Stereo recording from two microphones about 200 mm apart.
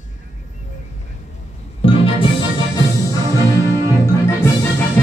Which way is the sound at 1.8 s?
25° left (ahead or behind).